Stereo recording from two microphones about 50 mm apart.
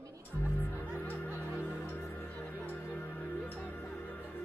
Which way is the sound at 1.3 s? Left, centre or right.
Right.